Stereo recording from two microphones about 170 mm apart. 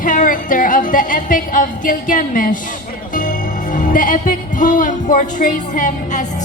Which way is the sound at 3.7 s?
50° left (ahead or behind).